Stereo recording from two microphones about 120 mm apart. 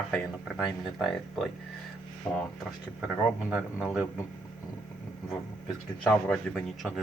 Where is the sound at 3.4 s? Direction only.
10° right (ahead or behind).